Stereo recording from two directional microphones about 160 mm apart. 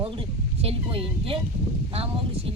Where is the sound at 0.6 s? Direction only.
40° right (ahead or behind).